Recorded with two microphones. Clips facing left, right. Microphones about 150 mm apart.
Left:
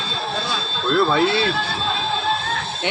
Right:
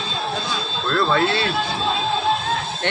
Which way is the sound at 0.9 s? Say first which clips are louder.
Left 2 dB; 5° left (ahead or behind).